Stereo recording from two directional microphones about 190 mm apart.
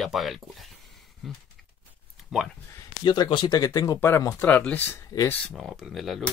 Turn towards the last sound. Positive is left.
turn(degrees=0)  # may be behind; listen again after turning